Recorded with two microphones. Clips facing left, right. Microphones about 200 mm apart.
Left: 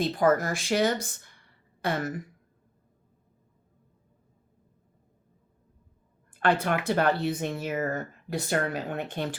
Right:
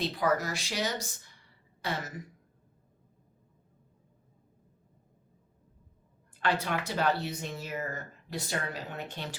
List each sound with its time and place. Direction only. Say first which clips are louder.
0.0 s speech: left 6 dB; 50° left (ahead or behind)
6.4 s speech: left 5 dB; 55° left (ahead or behind)